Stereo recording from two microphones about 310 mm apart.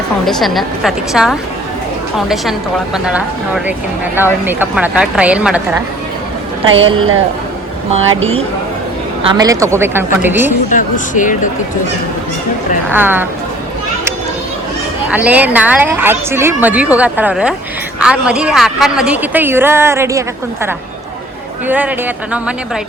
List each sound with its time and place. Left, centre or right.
0.3 s a woman's voice: centre
6.7 s speech: right
9.4 s speech: centre
10.7 s speech: left
12.9 s speech: centre
15.1 s a woman's voice: centre